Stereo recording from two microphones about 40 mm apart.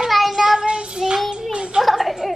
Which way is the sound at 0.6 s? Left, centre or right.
Right.